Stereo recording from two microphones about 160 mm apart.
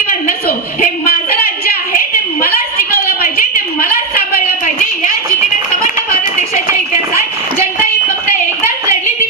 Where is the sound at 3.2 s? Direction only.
65° left (ahead or behind).